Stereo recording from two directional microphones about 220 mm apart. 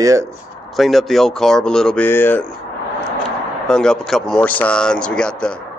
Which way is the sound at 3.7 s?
5° left (ahead or behind).